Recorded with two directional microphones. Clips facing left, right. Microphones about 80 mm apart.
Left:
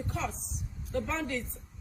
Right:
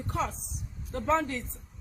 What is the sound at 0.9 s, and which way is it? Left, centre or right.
Speech, right.